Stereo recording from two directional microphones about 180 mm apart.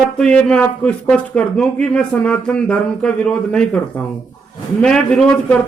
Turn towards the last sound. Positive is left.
turn(degrees=5)  # may be behind; listen again after turning